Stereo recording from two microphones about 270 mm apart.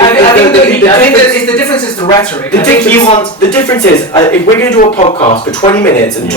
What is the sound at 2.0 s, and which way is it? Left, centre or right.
A man's voice, centre.